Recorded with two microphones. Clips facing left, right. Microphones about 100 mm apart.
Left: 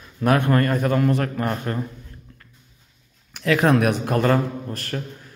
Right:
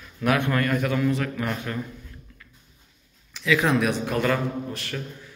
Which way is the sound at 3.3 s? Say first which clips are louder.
Left 4 dB; 50° left (ahead or behind).